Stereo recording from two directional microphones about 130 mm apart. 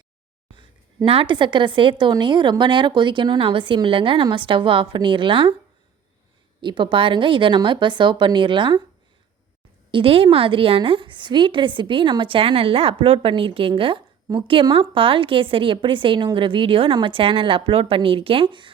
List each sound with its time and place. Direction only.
1.0 s speech: 45° right (ahead or behind)
6.6 s speech: 35° right (ahead or behind)
9.9 s a woman's voice: 45° right (ahead or behind)